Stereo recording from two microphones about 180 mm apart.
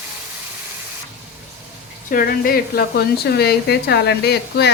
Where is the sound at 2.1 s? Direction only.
55° left (ahead or behind).